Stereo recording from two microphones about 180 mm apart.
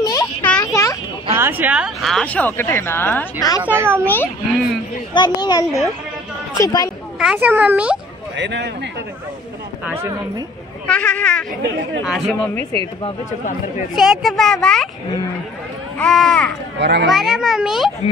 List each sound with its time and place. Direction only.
0.0 s a sound: 20° left (ahead or behind)
1.4 s speech: 10° right (ahead or behind); by 3.6 s 20° left (ahead or behind)
3.6 s a child's voice: 10° right (ahead or behind)
5.1 s a child's voice: 25° left (ahead or behind)
7.2 s a child's voice: 5° right (ahead or behind)
8.4 s a child's voice: 75° right (ahead or behind)
10.9 s speech: 5° left (ahead or behind)
13.9 s speech: 5° right (ahead or behind)
16.0 s speech: 5° left (ahead or behind)
16.7 s a child's voice: 75° right (ahead or behind)
17.1 s speech: centre (ahead or behind)